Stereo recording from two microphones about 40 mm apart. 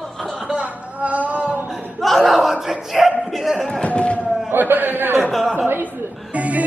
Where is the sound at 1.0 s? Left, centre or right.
Right.